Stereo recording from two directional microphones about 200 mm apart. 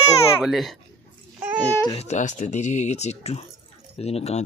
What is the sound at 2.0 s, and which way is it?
Speech, 35° left (ahead or behind).